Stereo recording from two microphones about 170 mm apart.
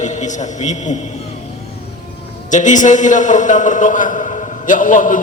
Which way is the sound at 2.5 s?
45° left (ahead or behind).